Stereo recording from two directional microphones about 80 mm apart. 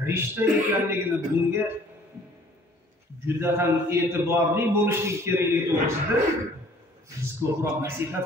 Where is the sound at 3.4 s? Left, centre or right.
Right.